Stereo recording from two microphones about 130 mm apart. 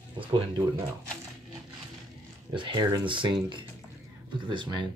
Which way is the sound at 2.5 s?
40° right (ahead or behind).